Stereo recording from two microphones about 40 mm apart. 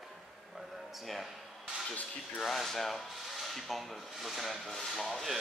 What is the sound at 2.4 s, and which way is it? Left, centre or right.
Rub, centre.